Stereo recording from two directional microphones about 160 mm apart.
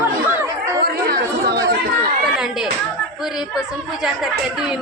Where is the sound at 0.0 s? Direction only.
20° right (ahead or behind).